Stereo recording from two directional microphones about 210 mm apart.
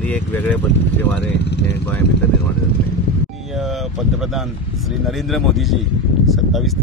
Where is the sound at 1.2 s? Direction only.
55° left (ahead or behind).